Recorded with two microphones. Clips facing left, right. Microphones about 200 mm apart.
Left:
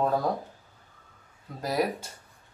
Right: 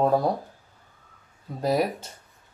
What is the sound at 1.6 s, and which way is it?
Speech, 25° right (ahead or behind).